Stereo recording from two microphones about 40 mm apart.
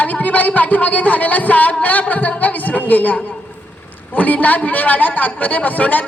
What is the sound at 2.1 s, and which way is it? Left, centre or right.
Music, left.